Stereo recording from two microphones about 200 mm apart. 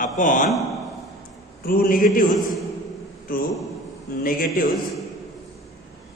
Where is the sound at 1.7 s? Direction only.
45° left (ahead or behind).